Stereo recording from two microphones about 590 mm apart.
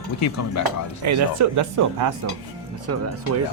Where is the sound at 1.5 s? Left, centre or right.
Right.